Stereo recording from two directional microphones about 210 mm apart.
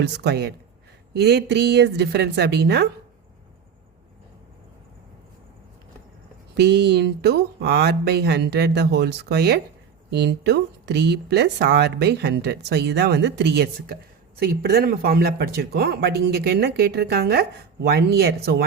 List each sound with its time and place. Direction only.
0.0 s speech: 50° right (ahead or behind)
6.5 s speech: 55° right (ahead or behind)